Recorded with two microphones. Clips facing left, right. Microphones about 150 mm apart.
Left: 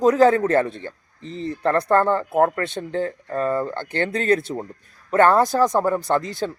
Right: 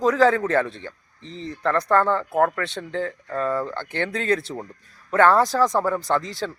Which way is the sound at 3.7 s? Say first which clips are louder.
Left 3 dB; 50° left (ahead or behind).